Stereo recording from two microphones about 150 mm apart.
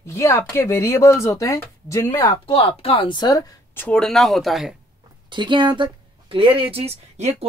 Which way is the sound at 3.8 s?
5° left (ahead or behind).